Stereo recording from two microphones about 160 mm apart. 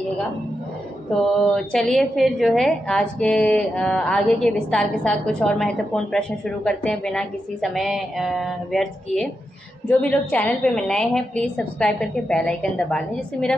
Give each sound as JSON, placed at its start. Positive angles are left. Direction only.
{"t": 1.7, "sound": "a woman's voice", "side_deg": 5}